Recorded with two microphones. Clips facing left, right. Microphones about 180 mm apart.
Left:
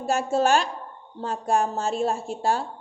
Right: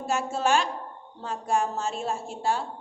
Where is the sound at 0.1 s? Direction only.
35° left (ahead or behind).